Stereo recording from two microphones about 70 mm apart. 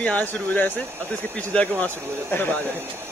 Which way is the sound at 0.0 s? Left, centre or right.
Left.